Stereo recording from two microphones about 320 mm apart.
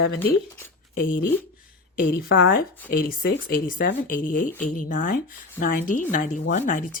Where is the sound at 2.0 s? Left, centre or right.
Left.